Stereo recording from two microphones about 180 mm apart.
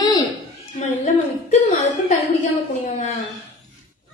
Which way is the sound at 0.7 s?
40° left (ahead or behind).